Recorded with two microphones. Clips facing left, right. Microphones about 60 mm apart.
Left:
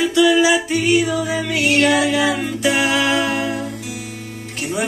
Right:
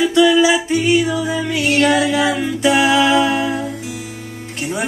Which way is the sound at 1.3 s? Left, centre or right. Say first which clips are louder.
Even; left.